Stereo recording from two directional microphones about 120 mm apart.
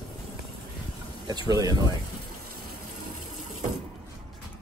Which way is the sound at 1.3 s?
35° right (ahead or behind).